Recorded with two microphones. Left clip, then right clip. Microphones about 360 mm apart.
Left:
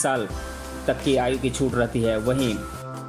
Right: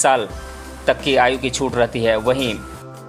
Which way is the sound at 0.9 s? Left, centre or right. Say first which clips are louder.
Right 7 dB; centre.